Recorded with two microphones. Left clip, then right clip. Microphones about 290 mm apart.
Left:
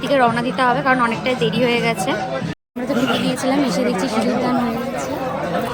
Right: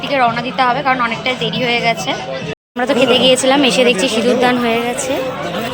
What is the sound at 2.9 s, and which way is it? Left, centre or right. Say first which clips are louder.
A woman's voice: right 9 dB; centre.